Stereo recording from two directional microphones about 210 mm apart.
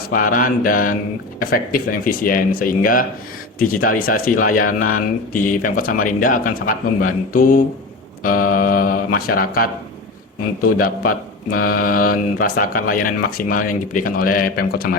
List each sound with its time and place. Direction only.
0.1 s speech: 40° left (ahead or behind)